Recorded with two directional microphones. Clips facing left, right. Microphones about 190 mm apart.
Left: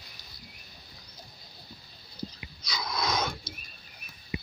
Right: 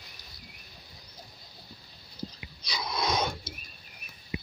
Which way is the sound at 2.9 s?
30° right (ahead or behind).